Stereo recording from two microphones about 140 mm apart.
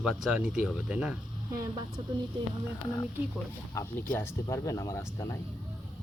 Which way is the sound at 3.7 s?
20° left (ahead or behind).